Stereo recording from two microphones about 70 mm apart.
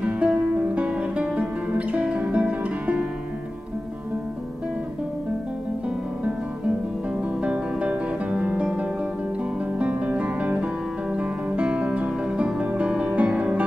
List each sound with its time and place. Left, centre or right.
0.0 s music: centre
7.4 s music: centre